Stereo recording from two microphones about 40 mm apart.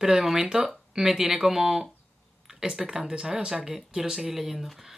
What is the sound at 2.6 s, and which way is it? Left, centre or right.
Speech, centre.